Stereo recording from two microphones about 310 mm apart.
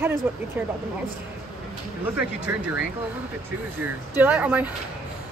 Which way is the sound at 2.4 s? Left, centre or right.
Centre.